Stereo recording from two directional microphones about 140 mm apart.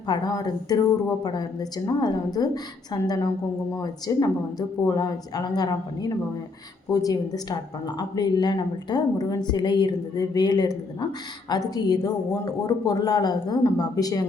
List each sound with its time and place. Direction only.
0.1 s a woman's voice: 30° left (ahead or behind)